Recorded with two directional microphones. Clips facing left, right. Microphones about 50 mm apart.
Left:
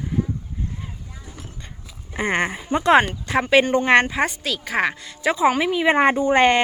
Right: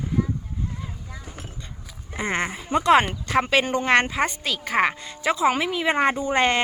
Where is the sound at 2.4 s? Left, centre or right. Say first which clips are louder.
Right 2 dB; centre.